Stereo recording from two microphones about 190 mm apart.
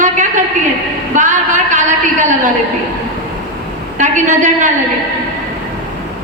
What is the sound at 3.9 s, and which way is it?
Speech, 40° right (ahead or behind).